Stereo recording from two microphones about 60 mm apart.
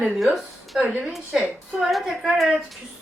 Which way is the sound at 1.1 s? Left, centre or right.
Centre.